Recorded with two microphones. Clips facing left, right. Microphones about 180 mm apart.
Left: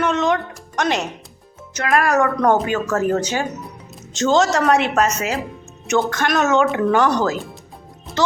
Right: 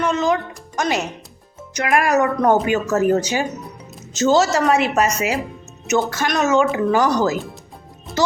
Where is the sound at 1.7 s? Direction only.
15° right (ahead or behind).